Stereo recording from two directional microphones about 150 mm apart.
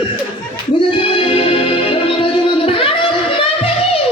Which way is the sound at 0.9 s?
35° left (ahead or behind).